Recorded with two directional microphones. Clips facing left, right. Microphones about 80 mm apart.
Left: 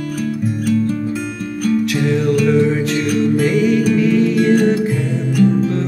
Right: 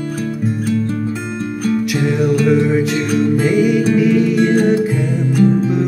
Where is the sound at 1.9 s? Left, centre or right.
Centre.